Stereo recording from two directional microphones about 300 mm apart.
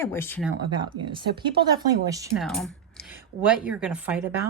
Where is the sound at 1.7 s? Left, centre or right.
Centre.